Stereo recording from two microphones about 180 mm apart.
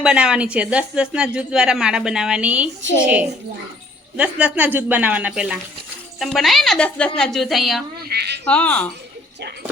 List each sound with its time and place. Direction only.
0.0 s a woman's voice: 5° right (ahead or behind)
8.0 s a man's voice: 65° right (ahead or behind)
8.4 s speech: 5° left (ahead or behind)